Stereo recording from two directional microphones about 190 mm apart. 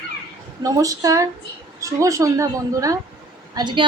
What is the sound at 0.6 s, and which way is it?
A woman's voice, 15° right (ahead or behind).